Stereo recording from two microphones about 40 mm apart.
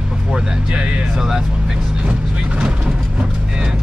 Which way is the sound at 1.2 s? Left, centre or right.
Centre.